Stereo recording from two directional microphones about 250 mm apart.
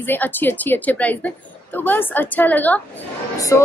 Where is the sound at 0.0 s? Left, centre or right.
Centre.